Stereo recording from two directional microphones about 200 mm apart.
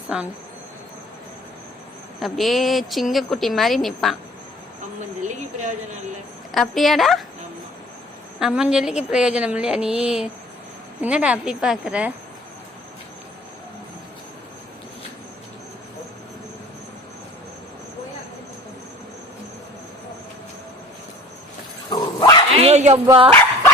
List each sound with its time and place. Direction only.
0.1 s speech: 5° right (ahead or behind)
2.2 s speech: centre (ahead or behind)
5.2 s a woman's voice: 40° right (ahead or behind)
6.5 s speech: centre (ahead or behind)
8.4 s speech: 5° right (ahead or behind)
21.9 s dog: 20° left (ahead or behind)
22.5 s dog: 30° right (ahead or behind)
23.0 s speech: 25° right (ahead or behind)